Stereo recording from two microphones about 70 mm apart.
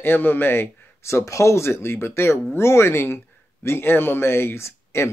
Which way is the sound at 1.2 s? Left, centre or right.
Left.